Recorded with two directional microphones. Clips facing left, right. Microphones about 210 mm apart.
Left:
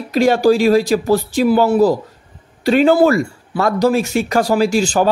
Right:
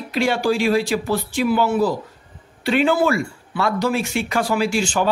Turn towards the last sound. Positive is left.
turn(degrees=40)  # may be behind; listen again after turning